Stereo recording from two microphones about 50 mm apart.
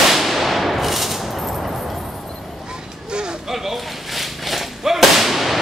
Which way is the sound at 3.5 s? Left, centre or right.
Centre.